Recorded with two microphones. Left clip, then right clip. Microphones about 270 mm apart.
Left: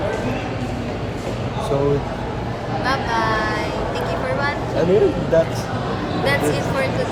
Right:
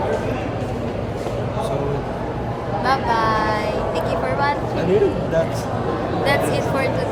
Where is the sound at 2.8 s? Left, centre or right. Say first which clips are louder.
Right 2 dB; centre.